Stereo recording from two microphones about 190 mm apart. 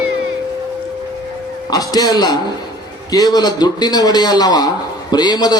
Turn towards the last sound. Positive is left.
turn(degrees=20)  # may be behind; listen again after turning